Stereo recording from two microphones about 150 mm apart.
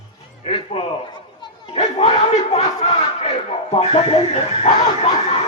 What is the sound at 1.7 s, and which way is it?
Battle cry, 40° left (ahead or behind).